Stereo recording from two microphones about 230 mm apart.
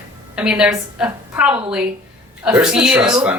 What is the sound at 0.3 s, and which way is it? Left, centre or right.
Speech, centre.